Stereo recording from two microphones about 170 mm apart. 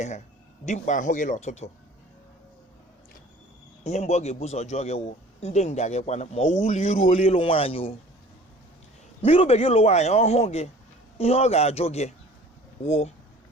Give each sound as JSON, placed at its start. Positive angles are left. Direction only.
{"t": 0.6, "sound": "speech", "side_deg": 45}
{"t": 3.8, "sound": "a man's voice", "side_deg": 40}
{"t": 9.2, "sound": "a man's voice", "side_deg": 35}